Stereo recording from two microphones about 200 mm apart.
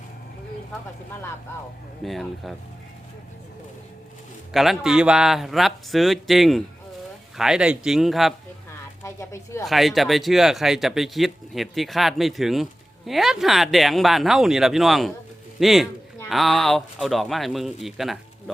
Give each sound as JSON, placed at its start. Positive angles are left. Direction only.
{"t": 2.0, "sound": "speech", "side_deg": 0}
{"t": 4.5, "sound": "speech", "side_deg": 0}
{"t": 9.0, "sound": "speech", "side_deg": 15}
{"t": 9.6, "sound": "speech", "side_deg": 0}